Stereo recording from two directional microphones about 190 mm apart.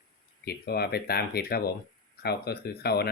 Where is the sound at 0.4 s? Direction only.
55° left (ahead or behind).